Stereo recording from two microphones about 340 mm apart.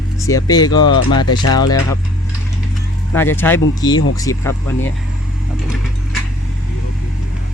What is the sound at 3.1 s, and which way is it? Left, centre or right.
Speech, centre.